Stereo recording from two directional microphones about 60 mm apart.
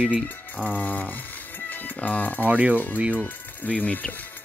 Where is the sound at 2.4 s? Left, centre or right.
Right.